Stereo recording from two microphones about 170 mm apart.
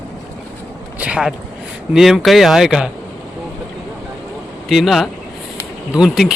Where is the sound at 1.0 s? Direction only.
5° right (ahead or behind).